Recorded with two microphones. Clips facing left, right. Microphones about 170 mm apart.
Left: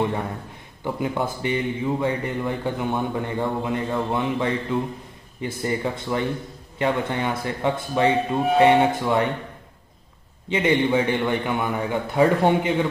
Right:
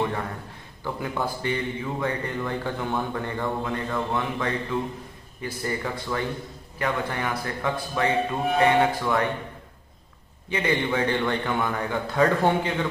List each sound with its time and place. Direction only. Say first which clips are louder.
0.8 s speech: left 4 dB; 20° left (ahead or behind)
10.5 s a man's voice: left 5 dB; 20° left (ahead or behind)